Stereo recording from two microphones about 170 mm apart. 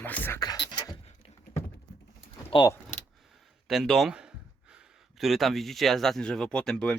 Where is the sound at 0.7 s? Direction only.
25° left (ahead or behind).